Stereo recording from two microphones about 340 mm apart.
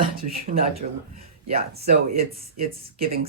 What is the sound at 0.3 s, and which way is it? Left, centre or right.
Speech, right.